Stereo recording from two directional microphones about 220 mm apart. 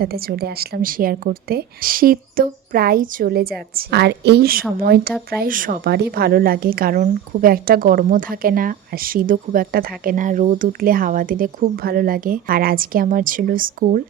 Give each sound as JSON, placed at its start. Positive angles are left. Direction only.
{"t": 0.0, "sound": "a woman's voice", "side_deg": -45}